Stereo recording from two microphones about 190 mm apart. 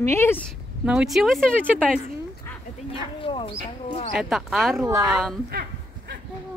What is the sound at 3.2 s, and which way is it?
Speech, 25° left (ahead or behind).